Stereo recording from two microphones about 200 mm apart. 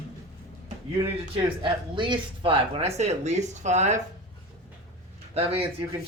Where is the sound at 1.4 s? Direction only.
25° right (ahead or behind).